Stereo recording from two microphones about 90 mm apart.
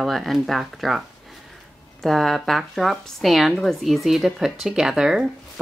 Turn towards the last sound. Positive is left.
turn(degrees=-5)  # may be behind; listen again after turning